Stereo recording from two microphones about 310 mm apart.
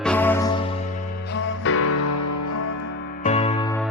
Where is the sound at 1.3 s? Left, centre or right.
Left.